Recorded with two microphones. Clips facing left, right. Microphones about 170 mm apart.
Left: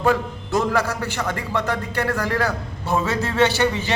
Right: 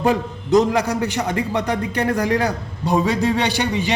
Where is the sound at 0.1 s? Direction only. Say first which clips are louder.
Right 5 dB; 20° right (ahead or behind).